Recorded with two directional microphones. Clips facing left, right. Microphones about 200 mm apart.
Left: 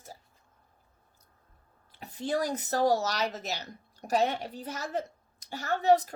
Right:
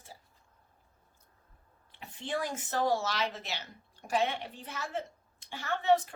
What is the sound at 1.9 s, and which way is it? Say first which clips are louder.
Speech: left 5 dB; 40° left (ahead or behind).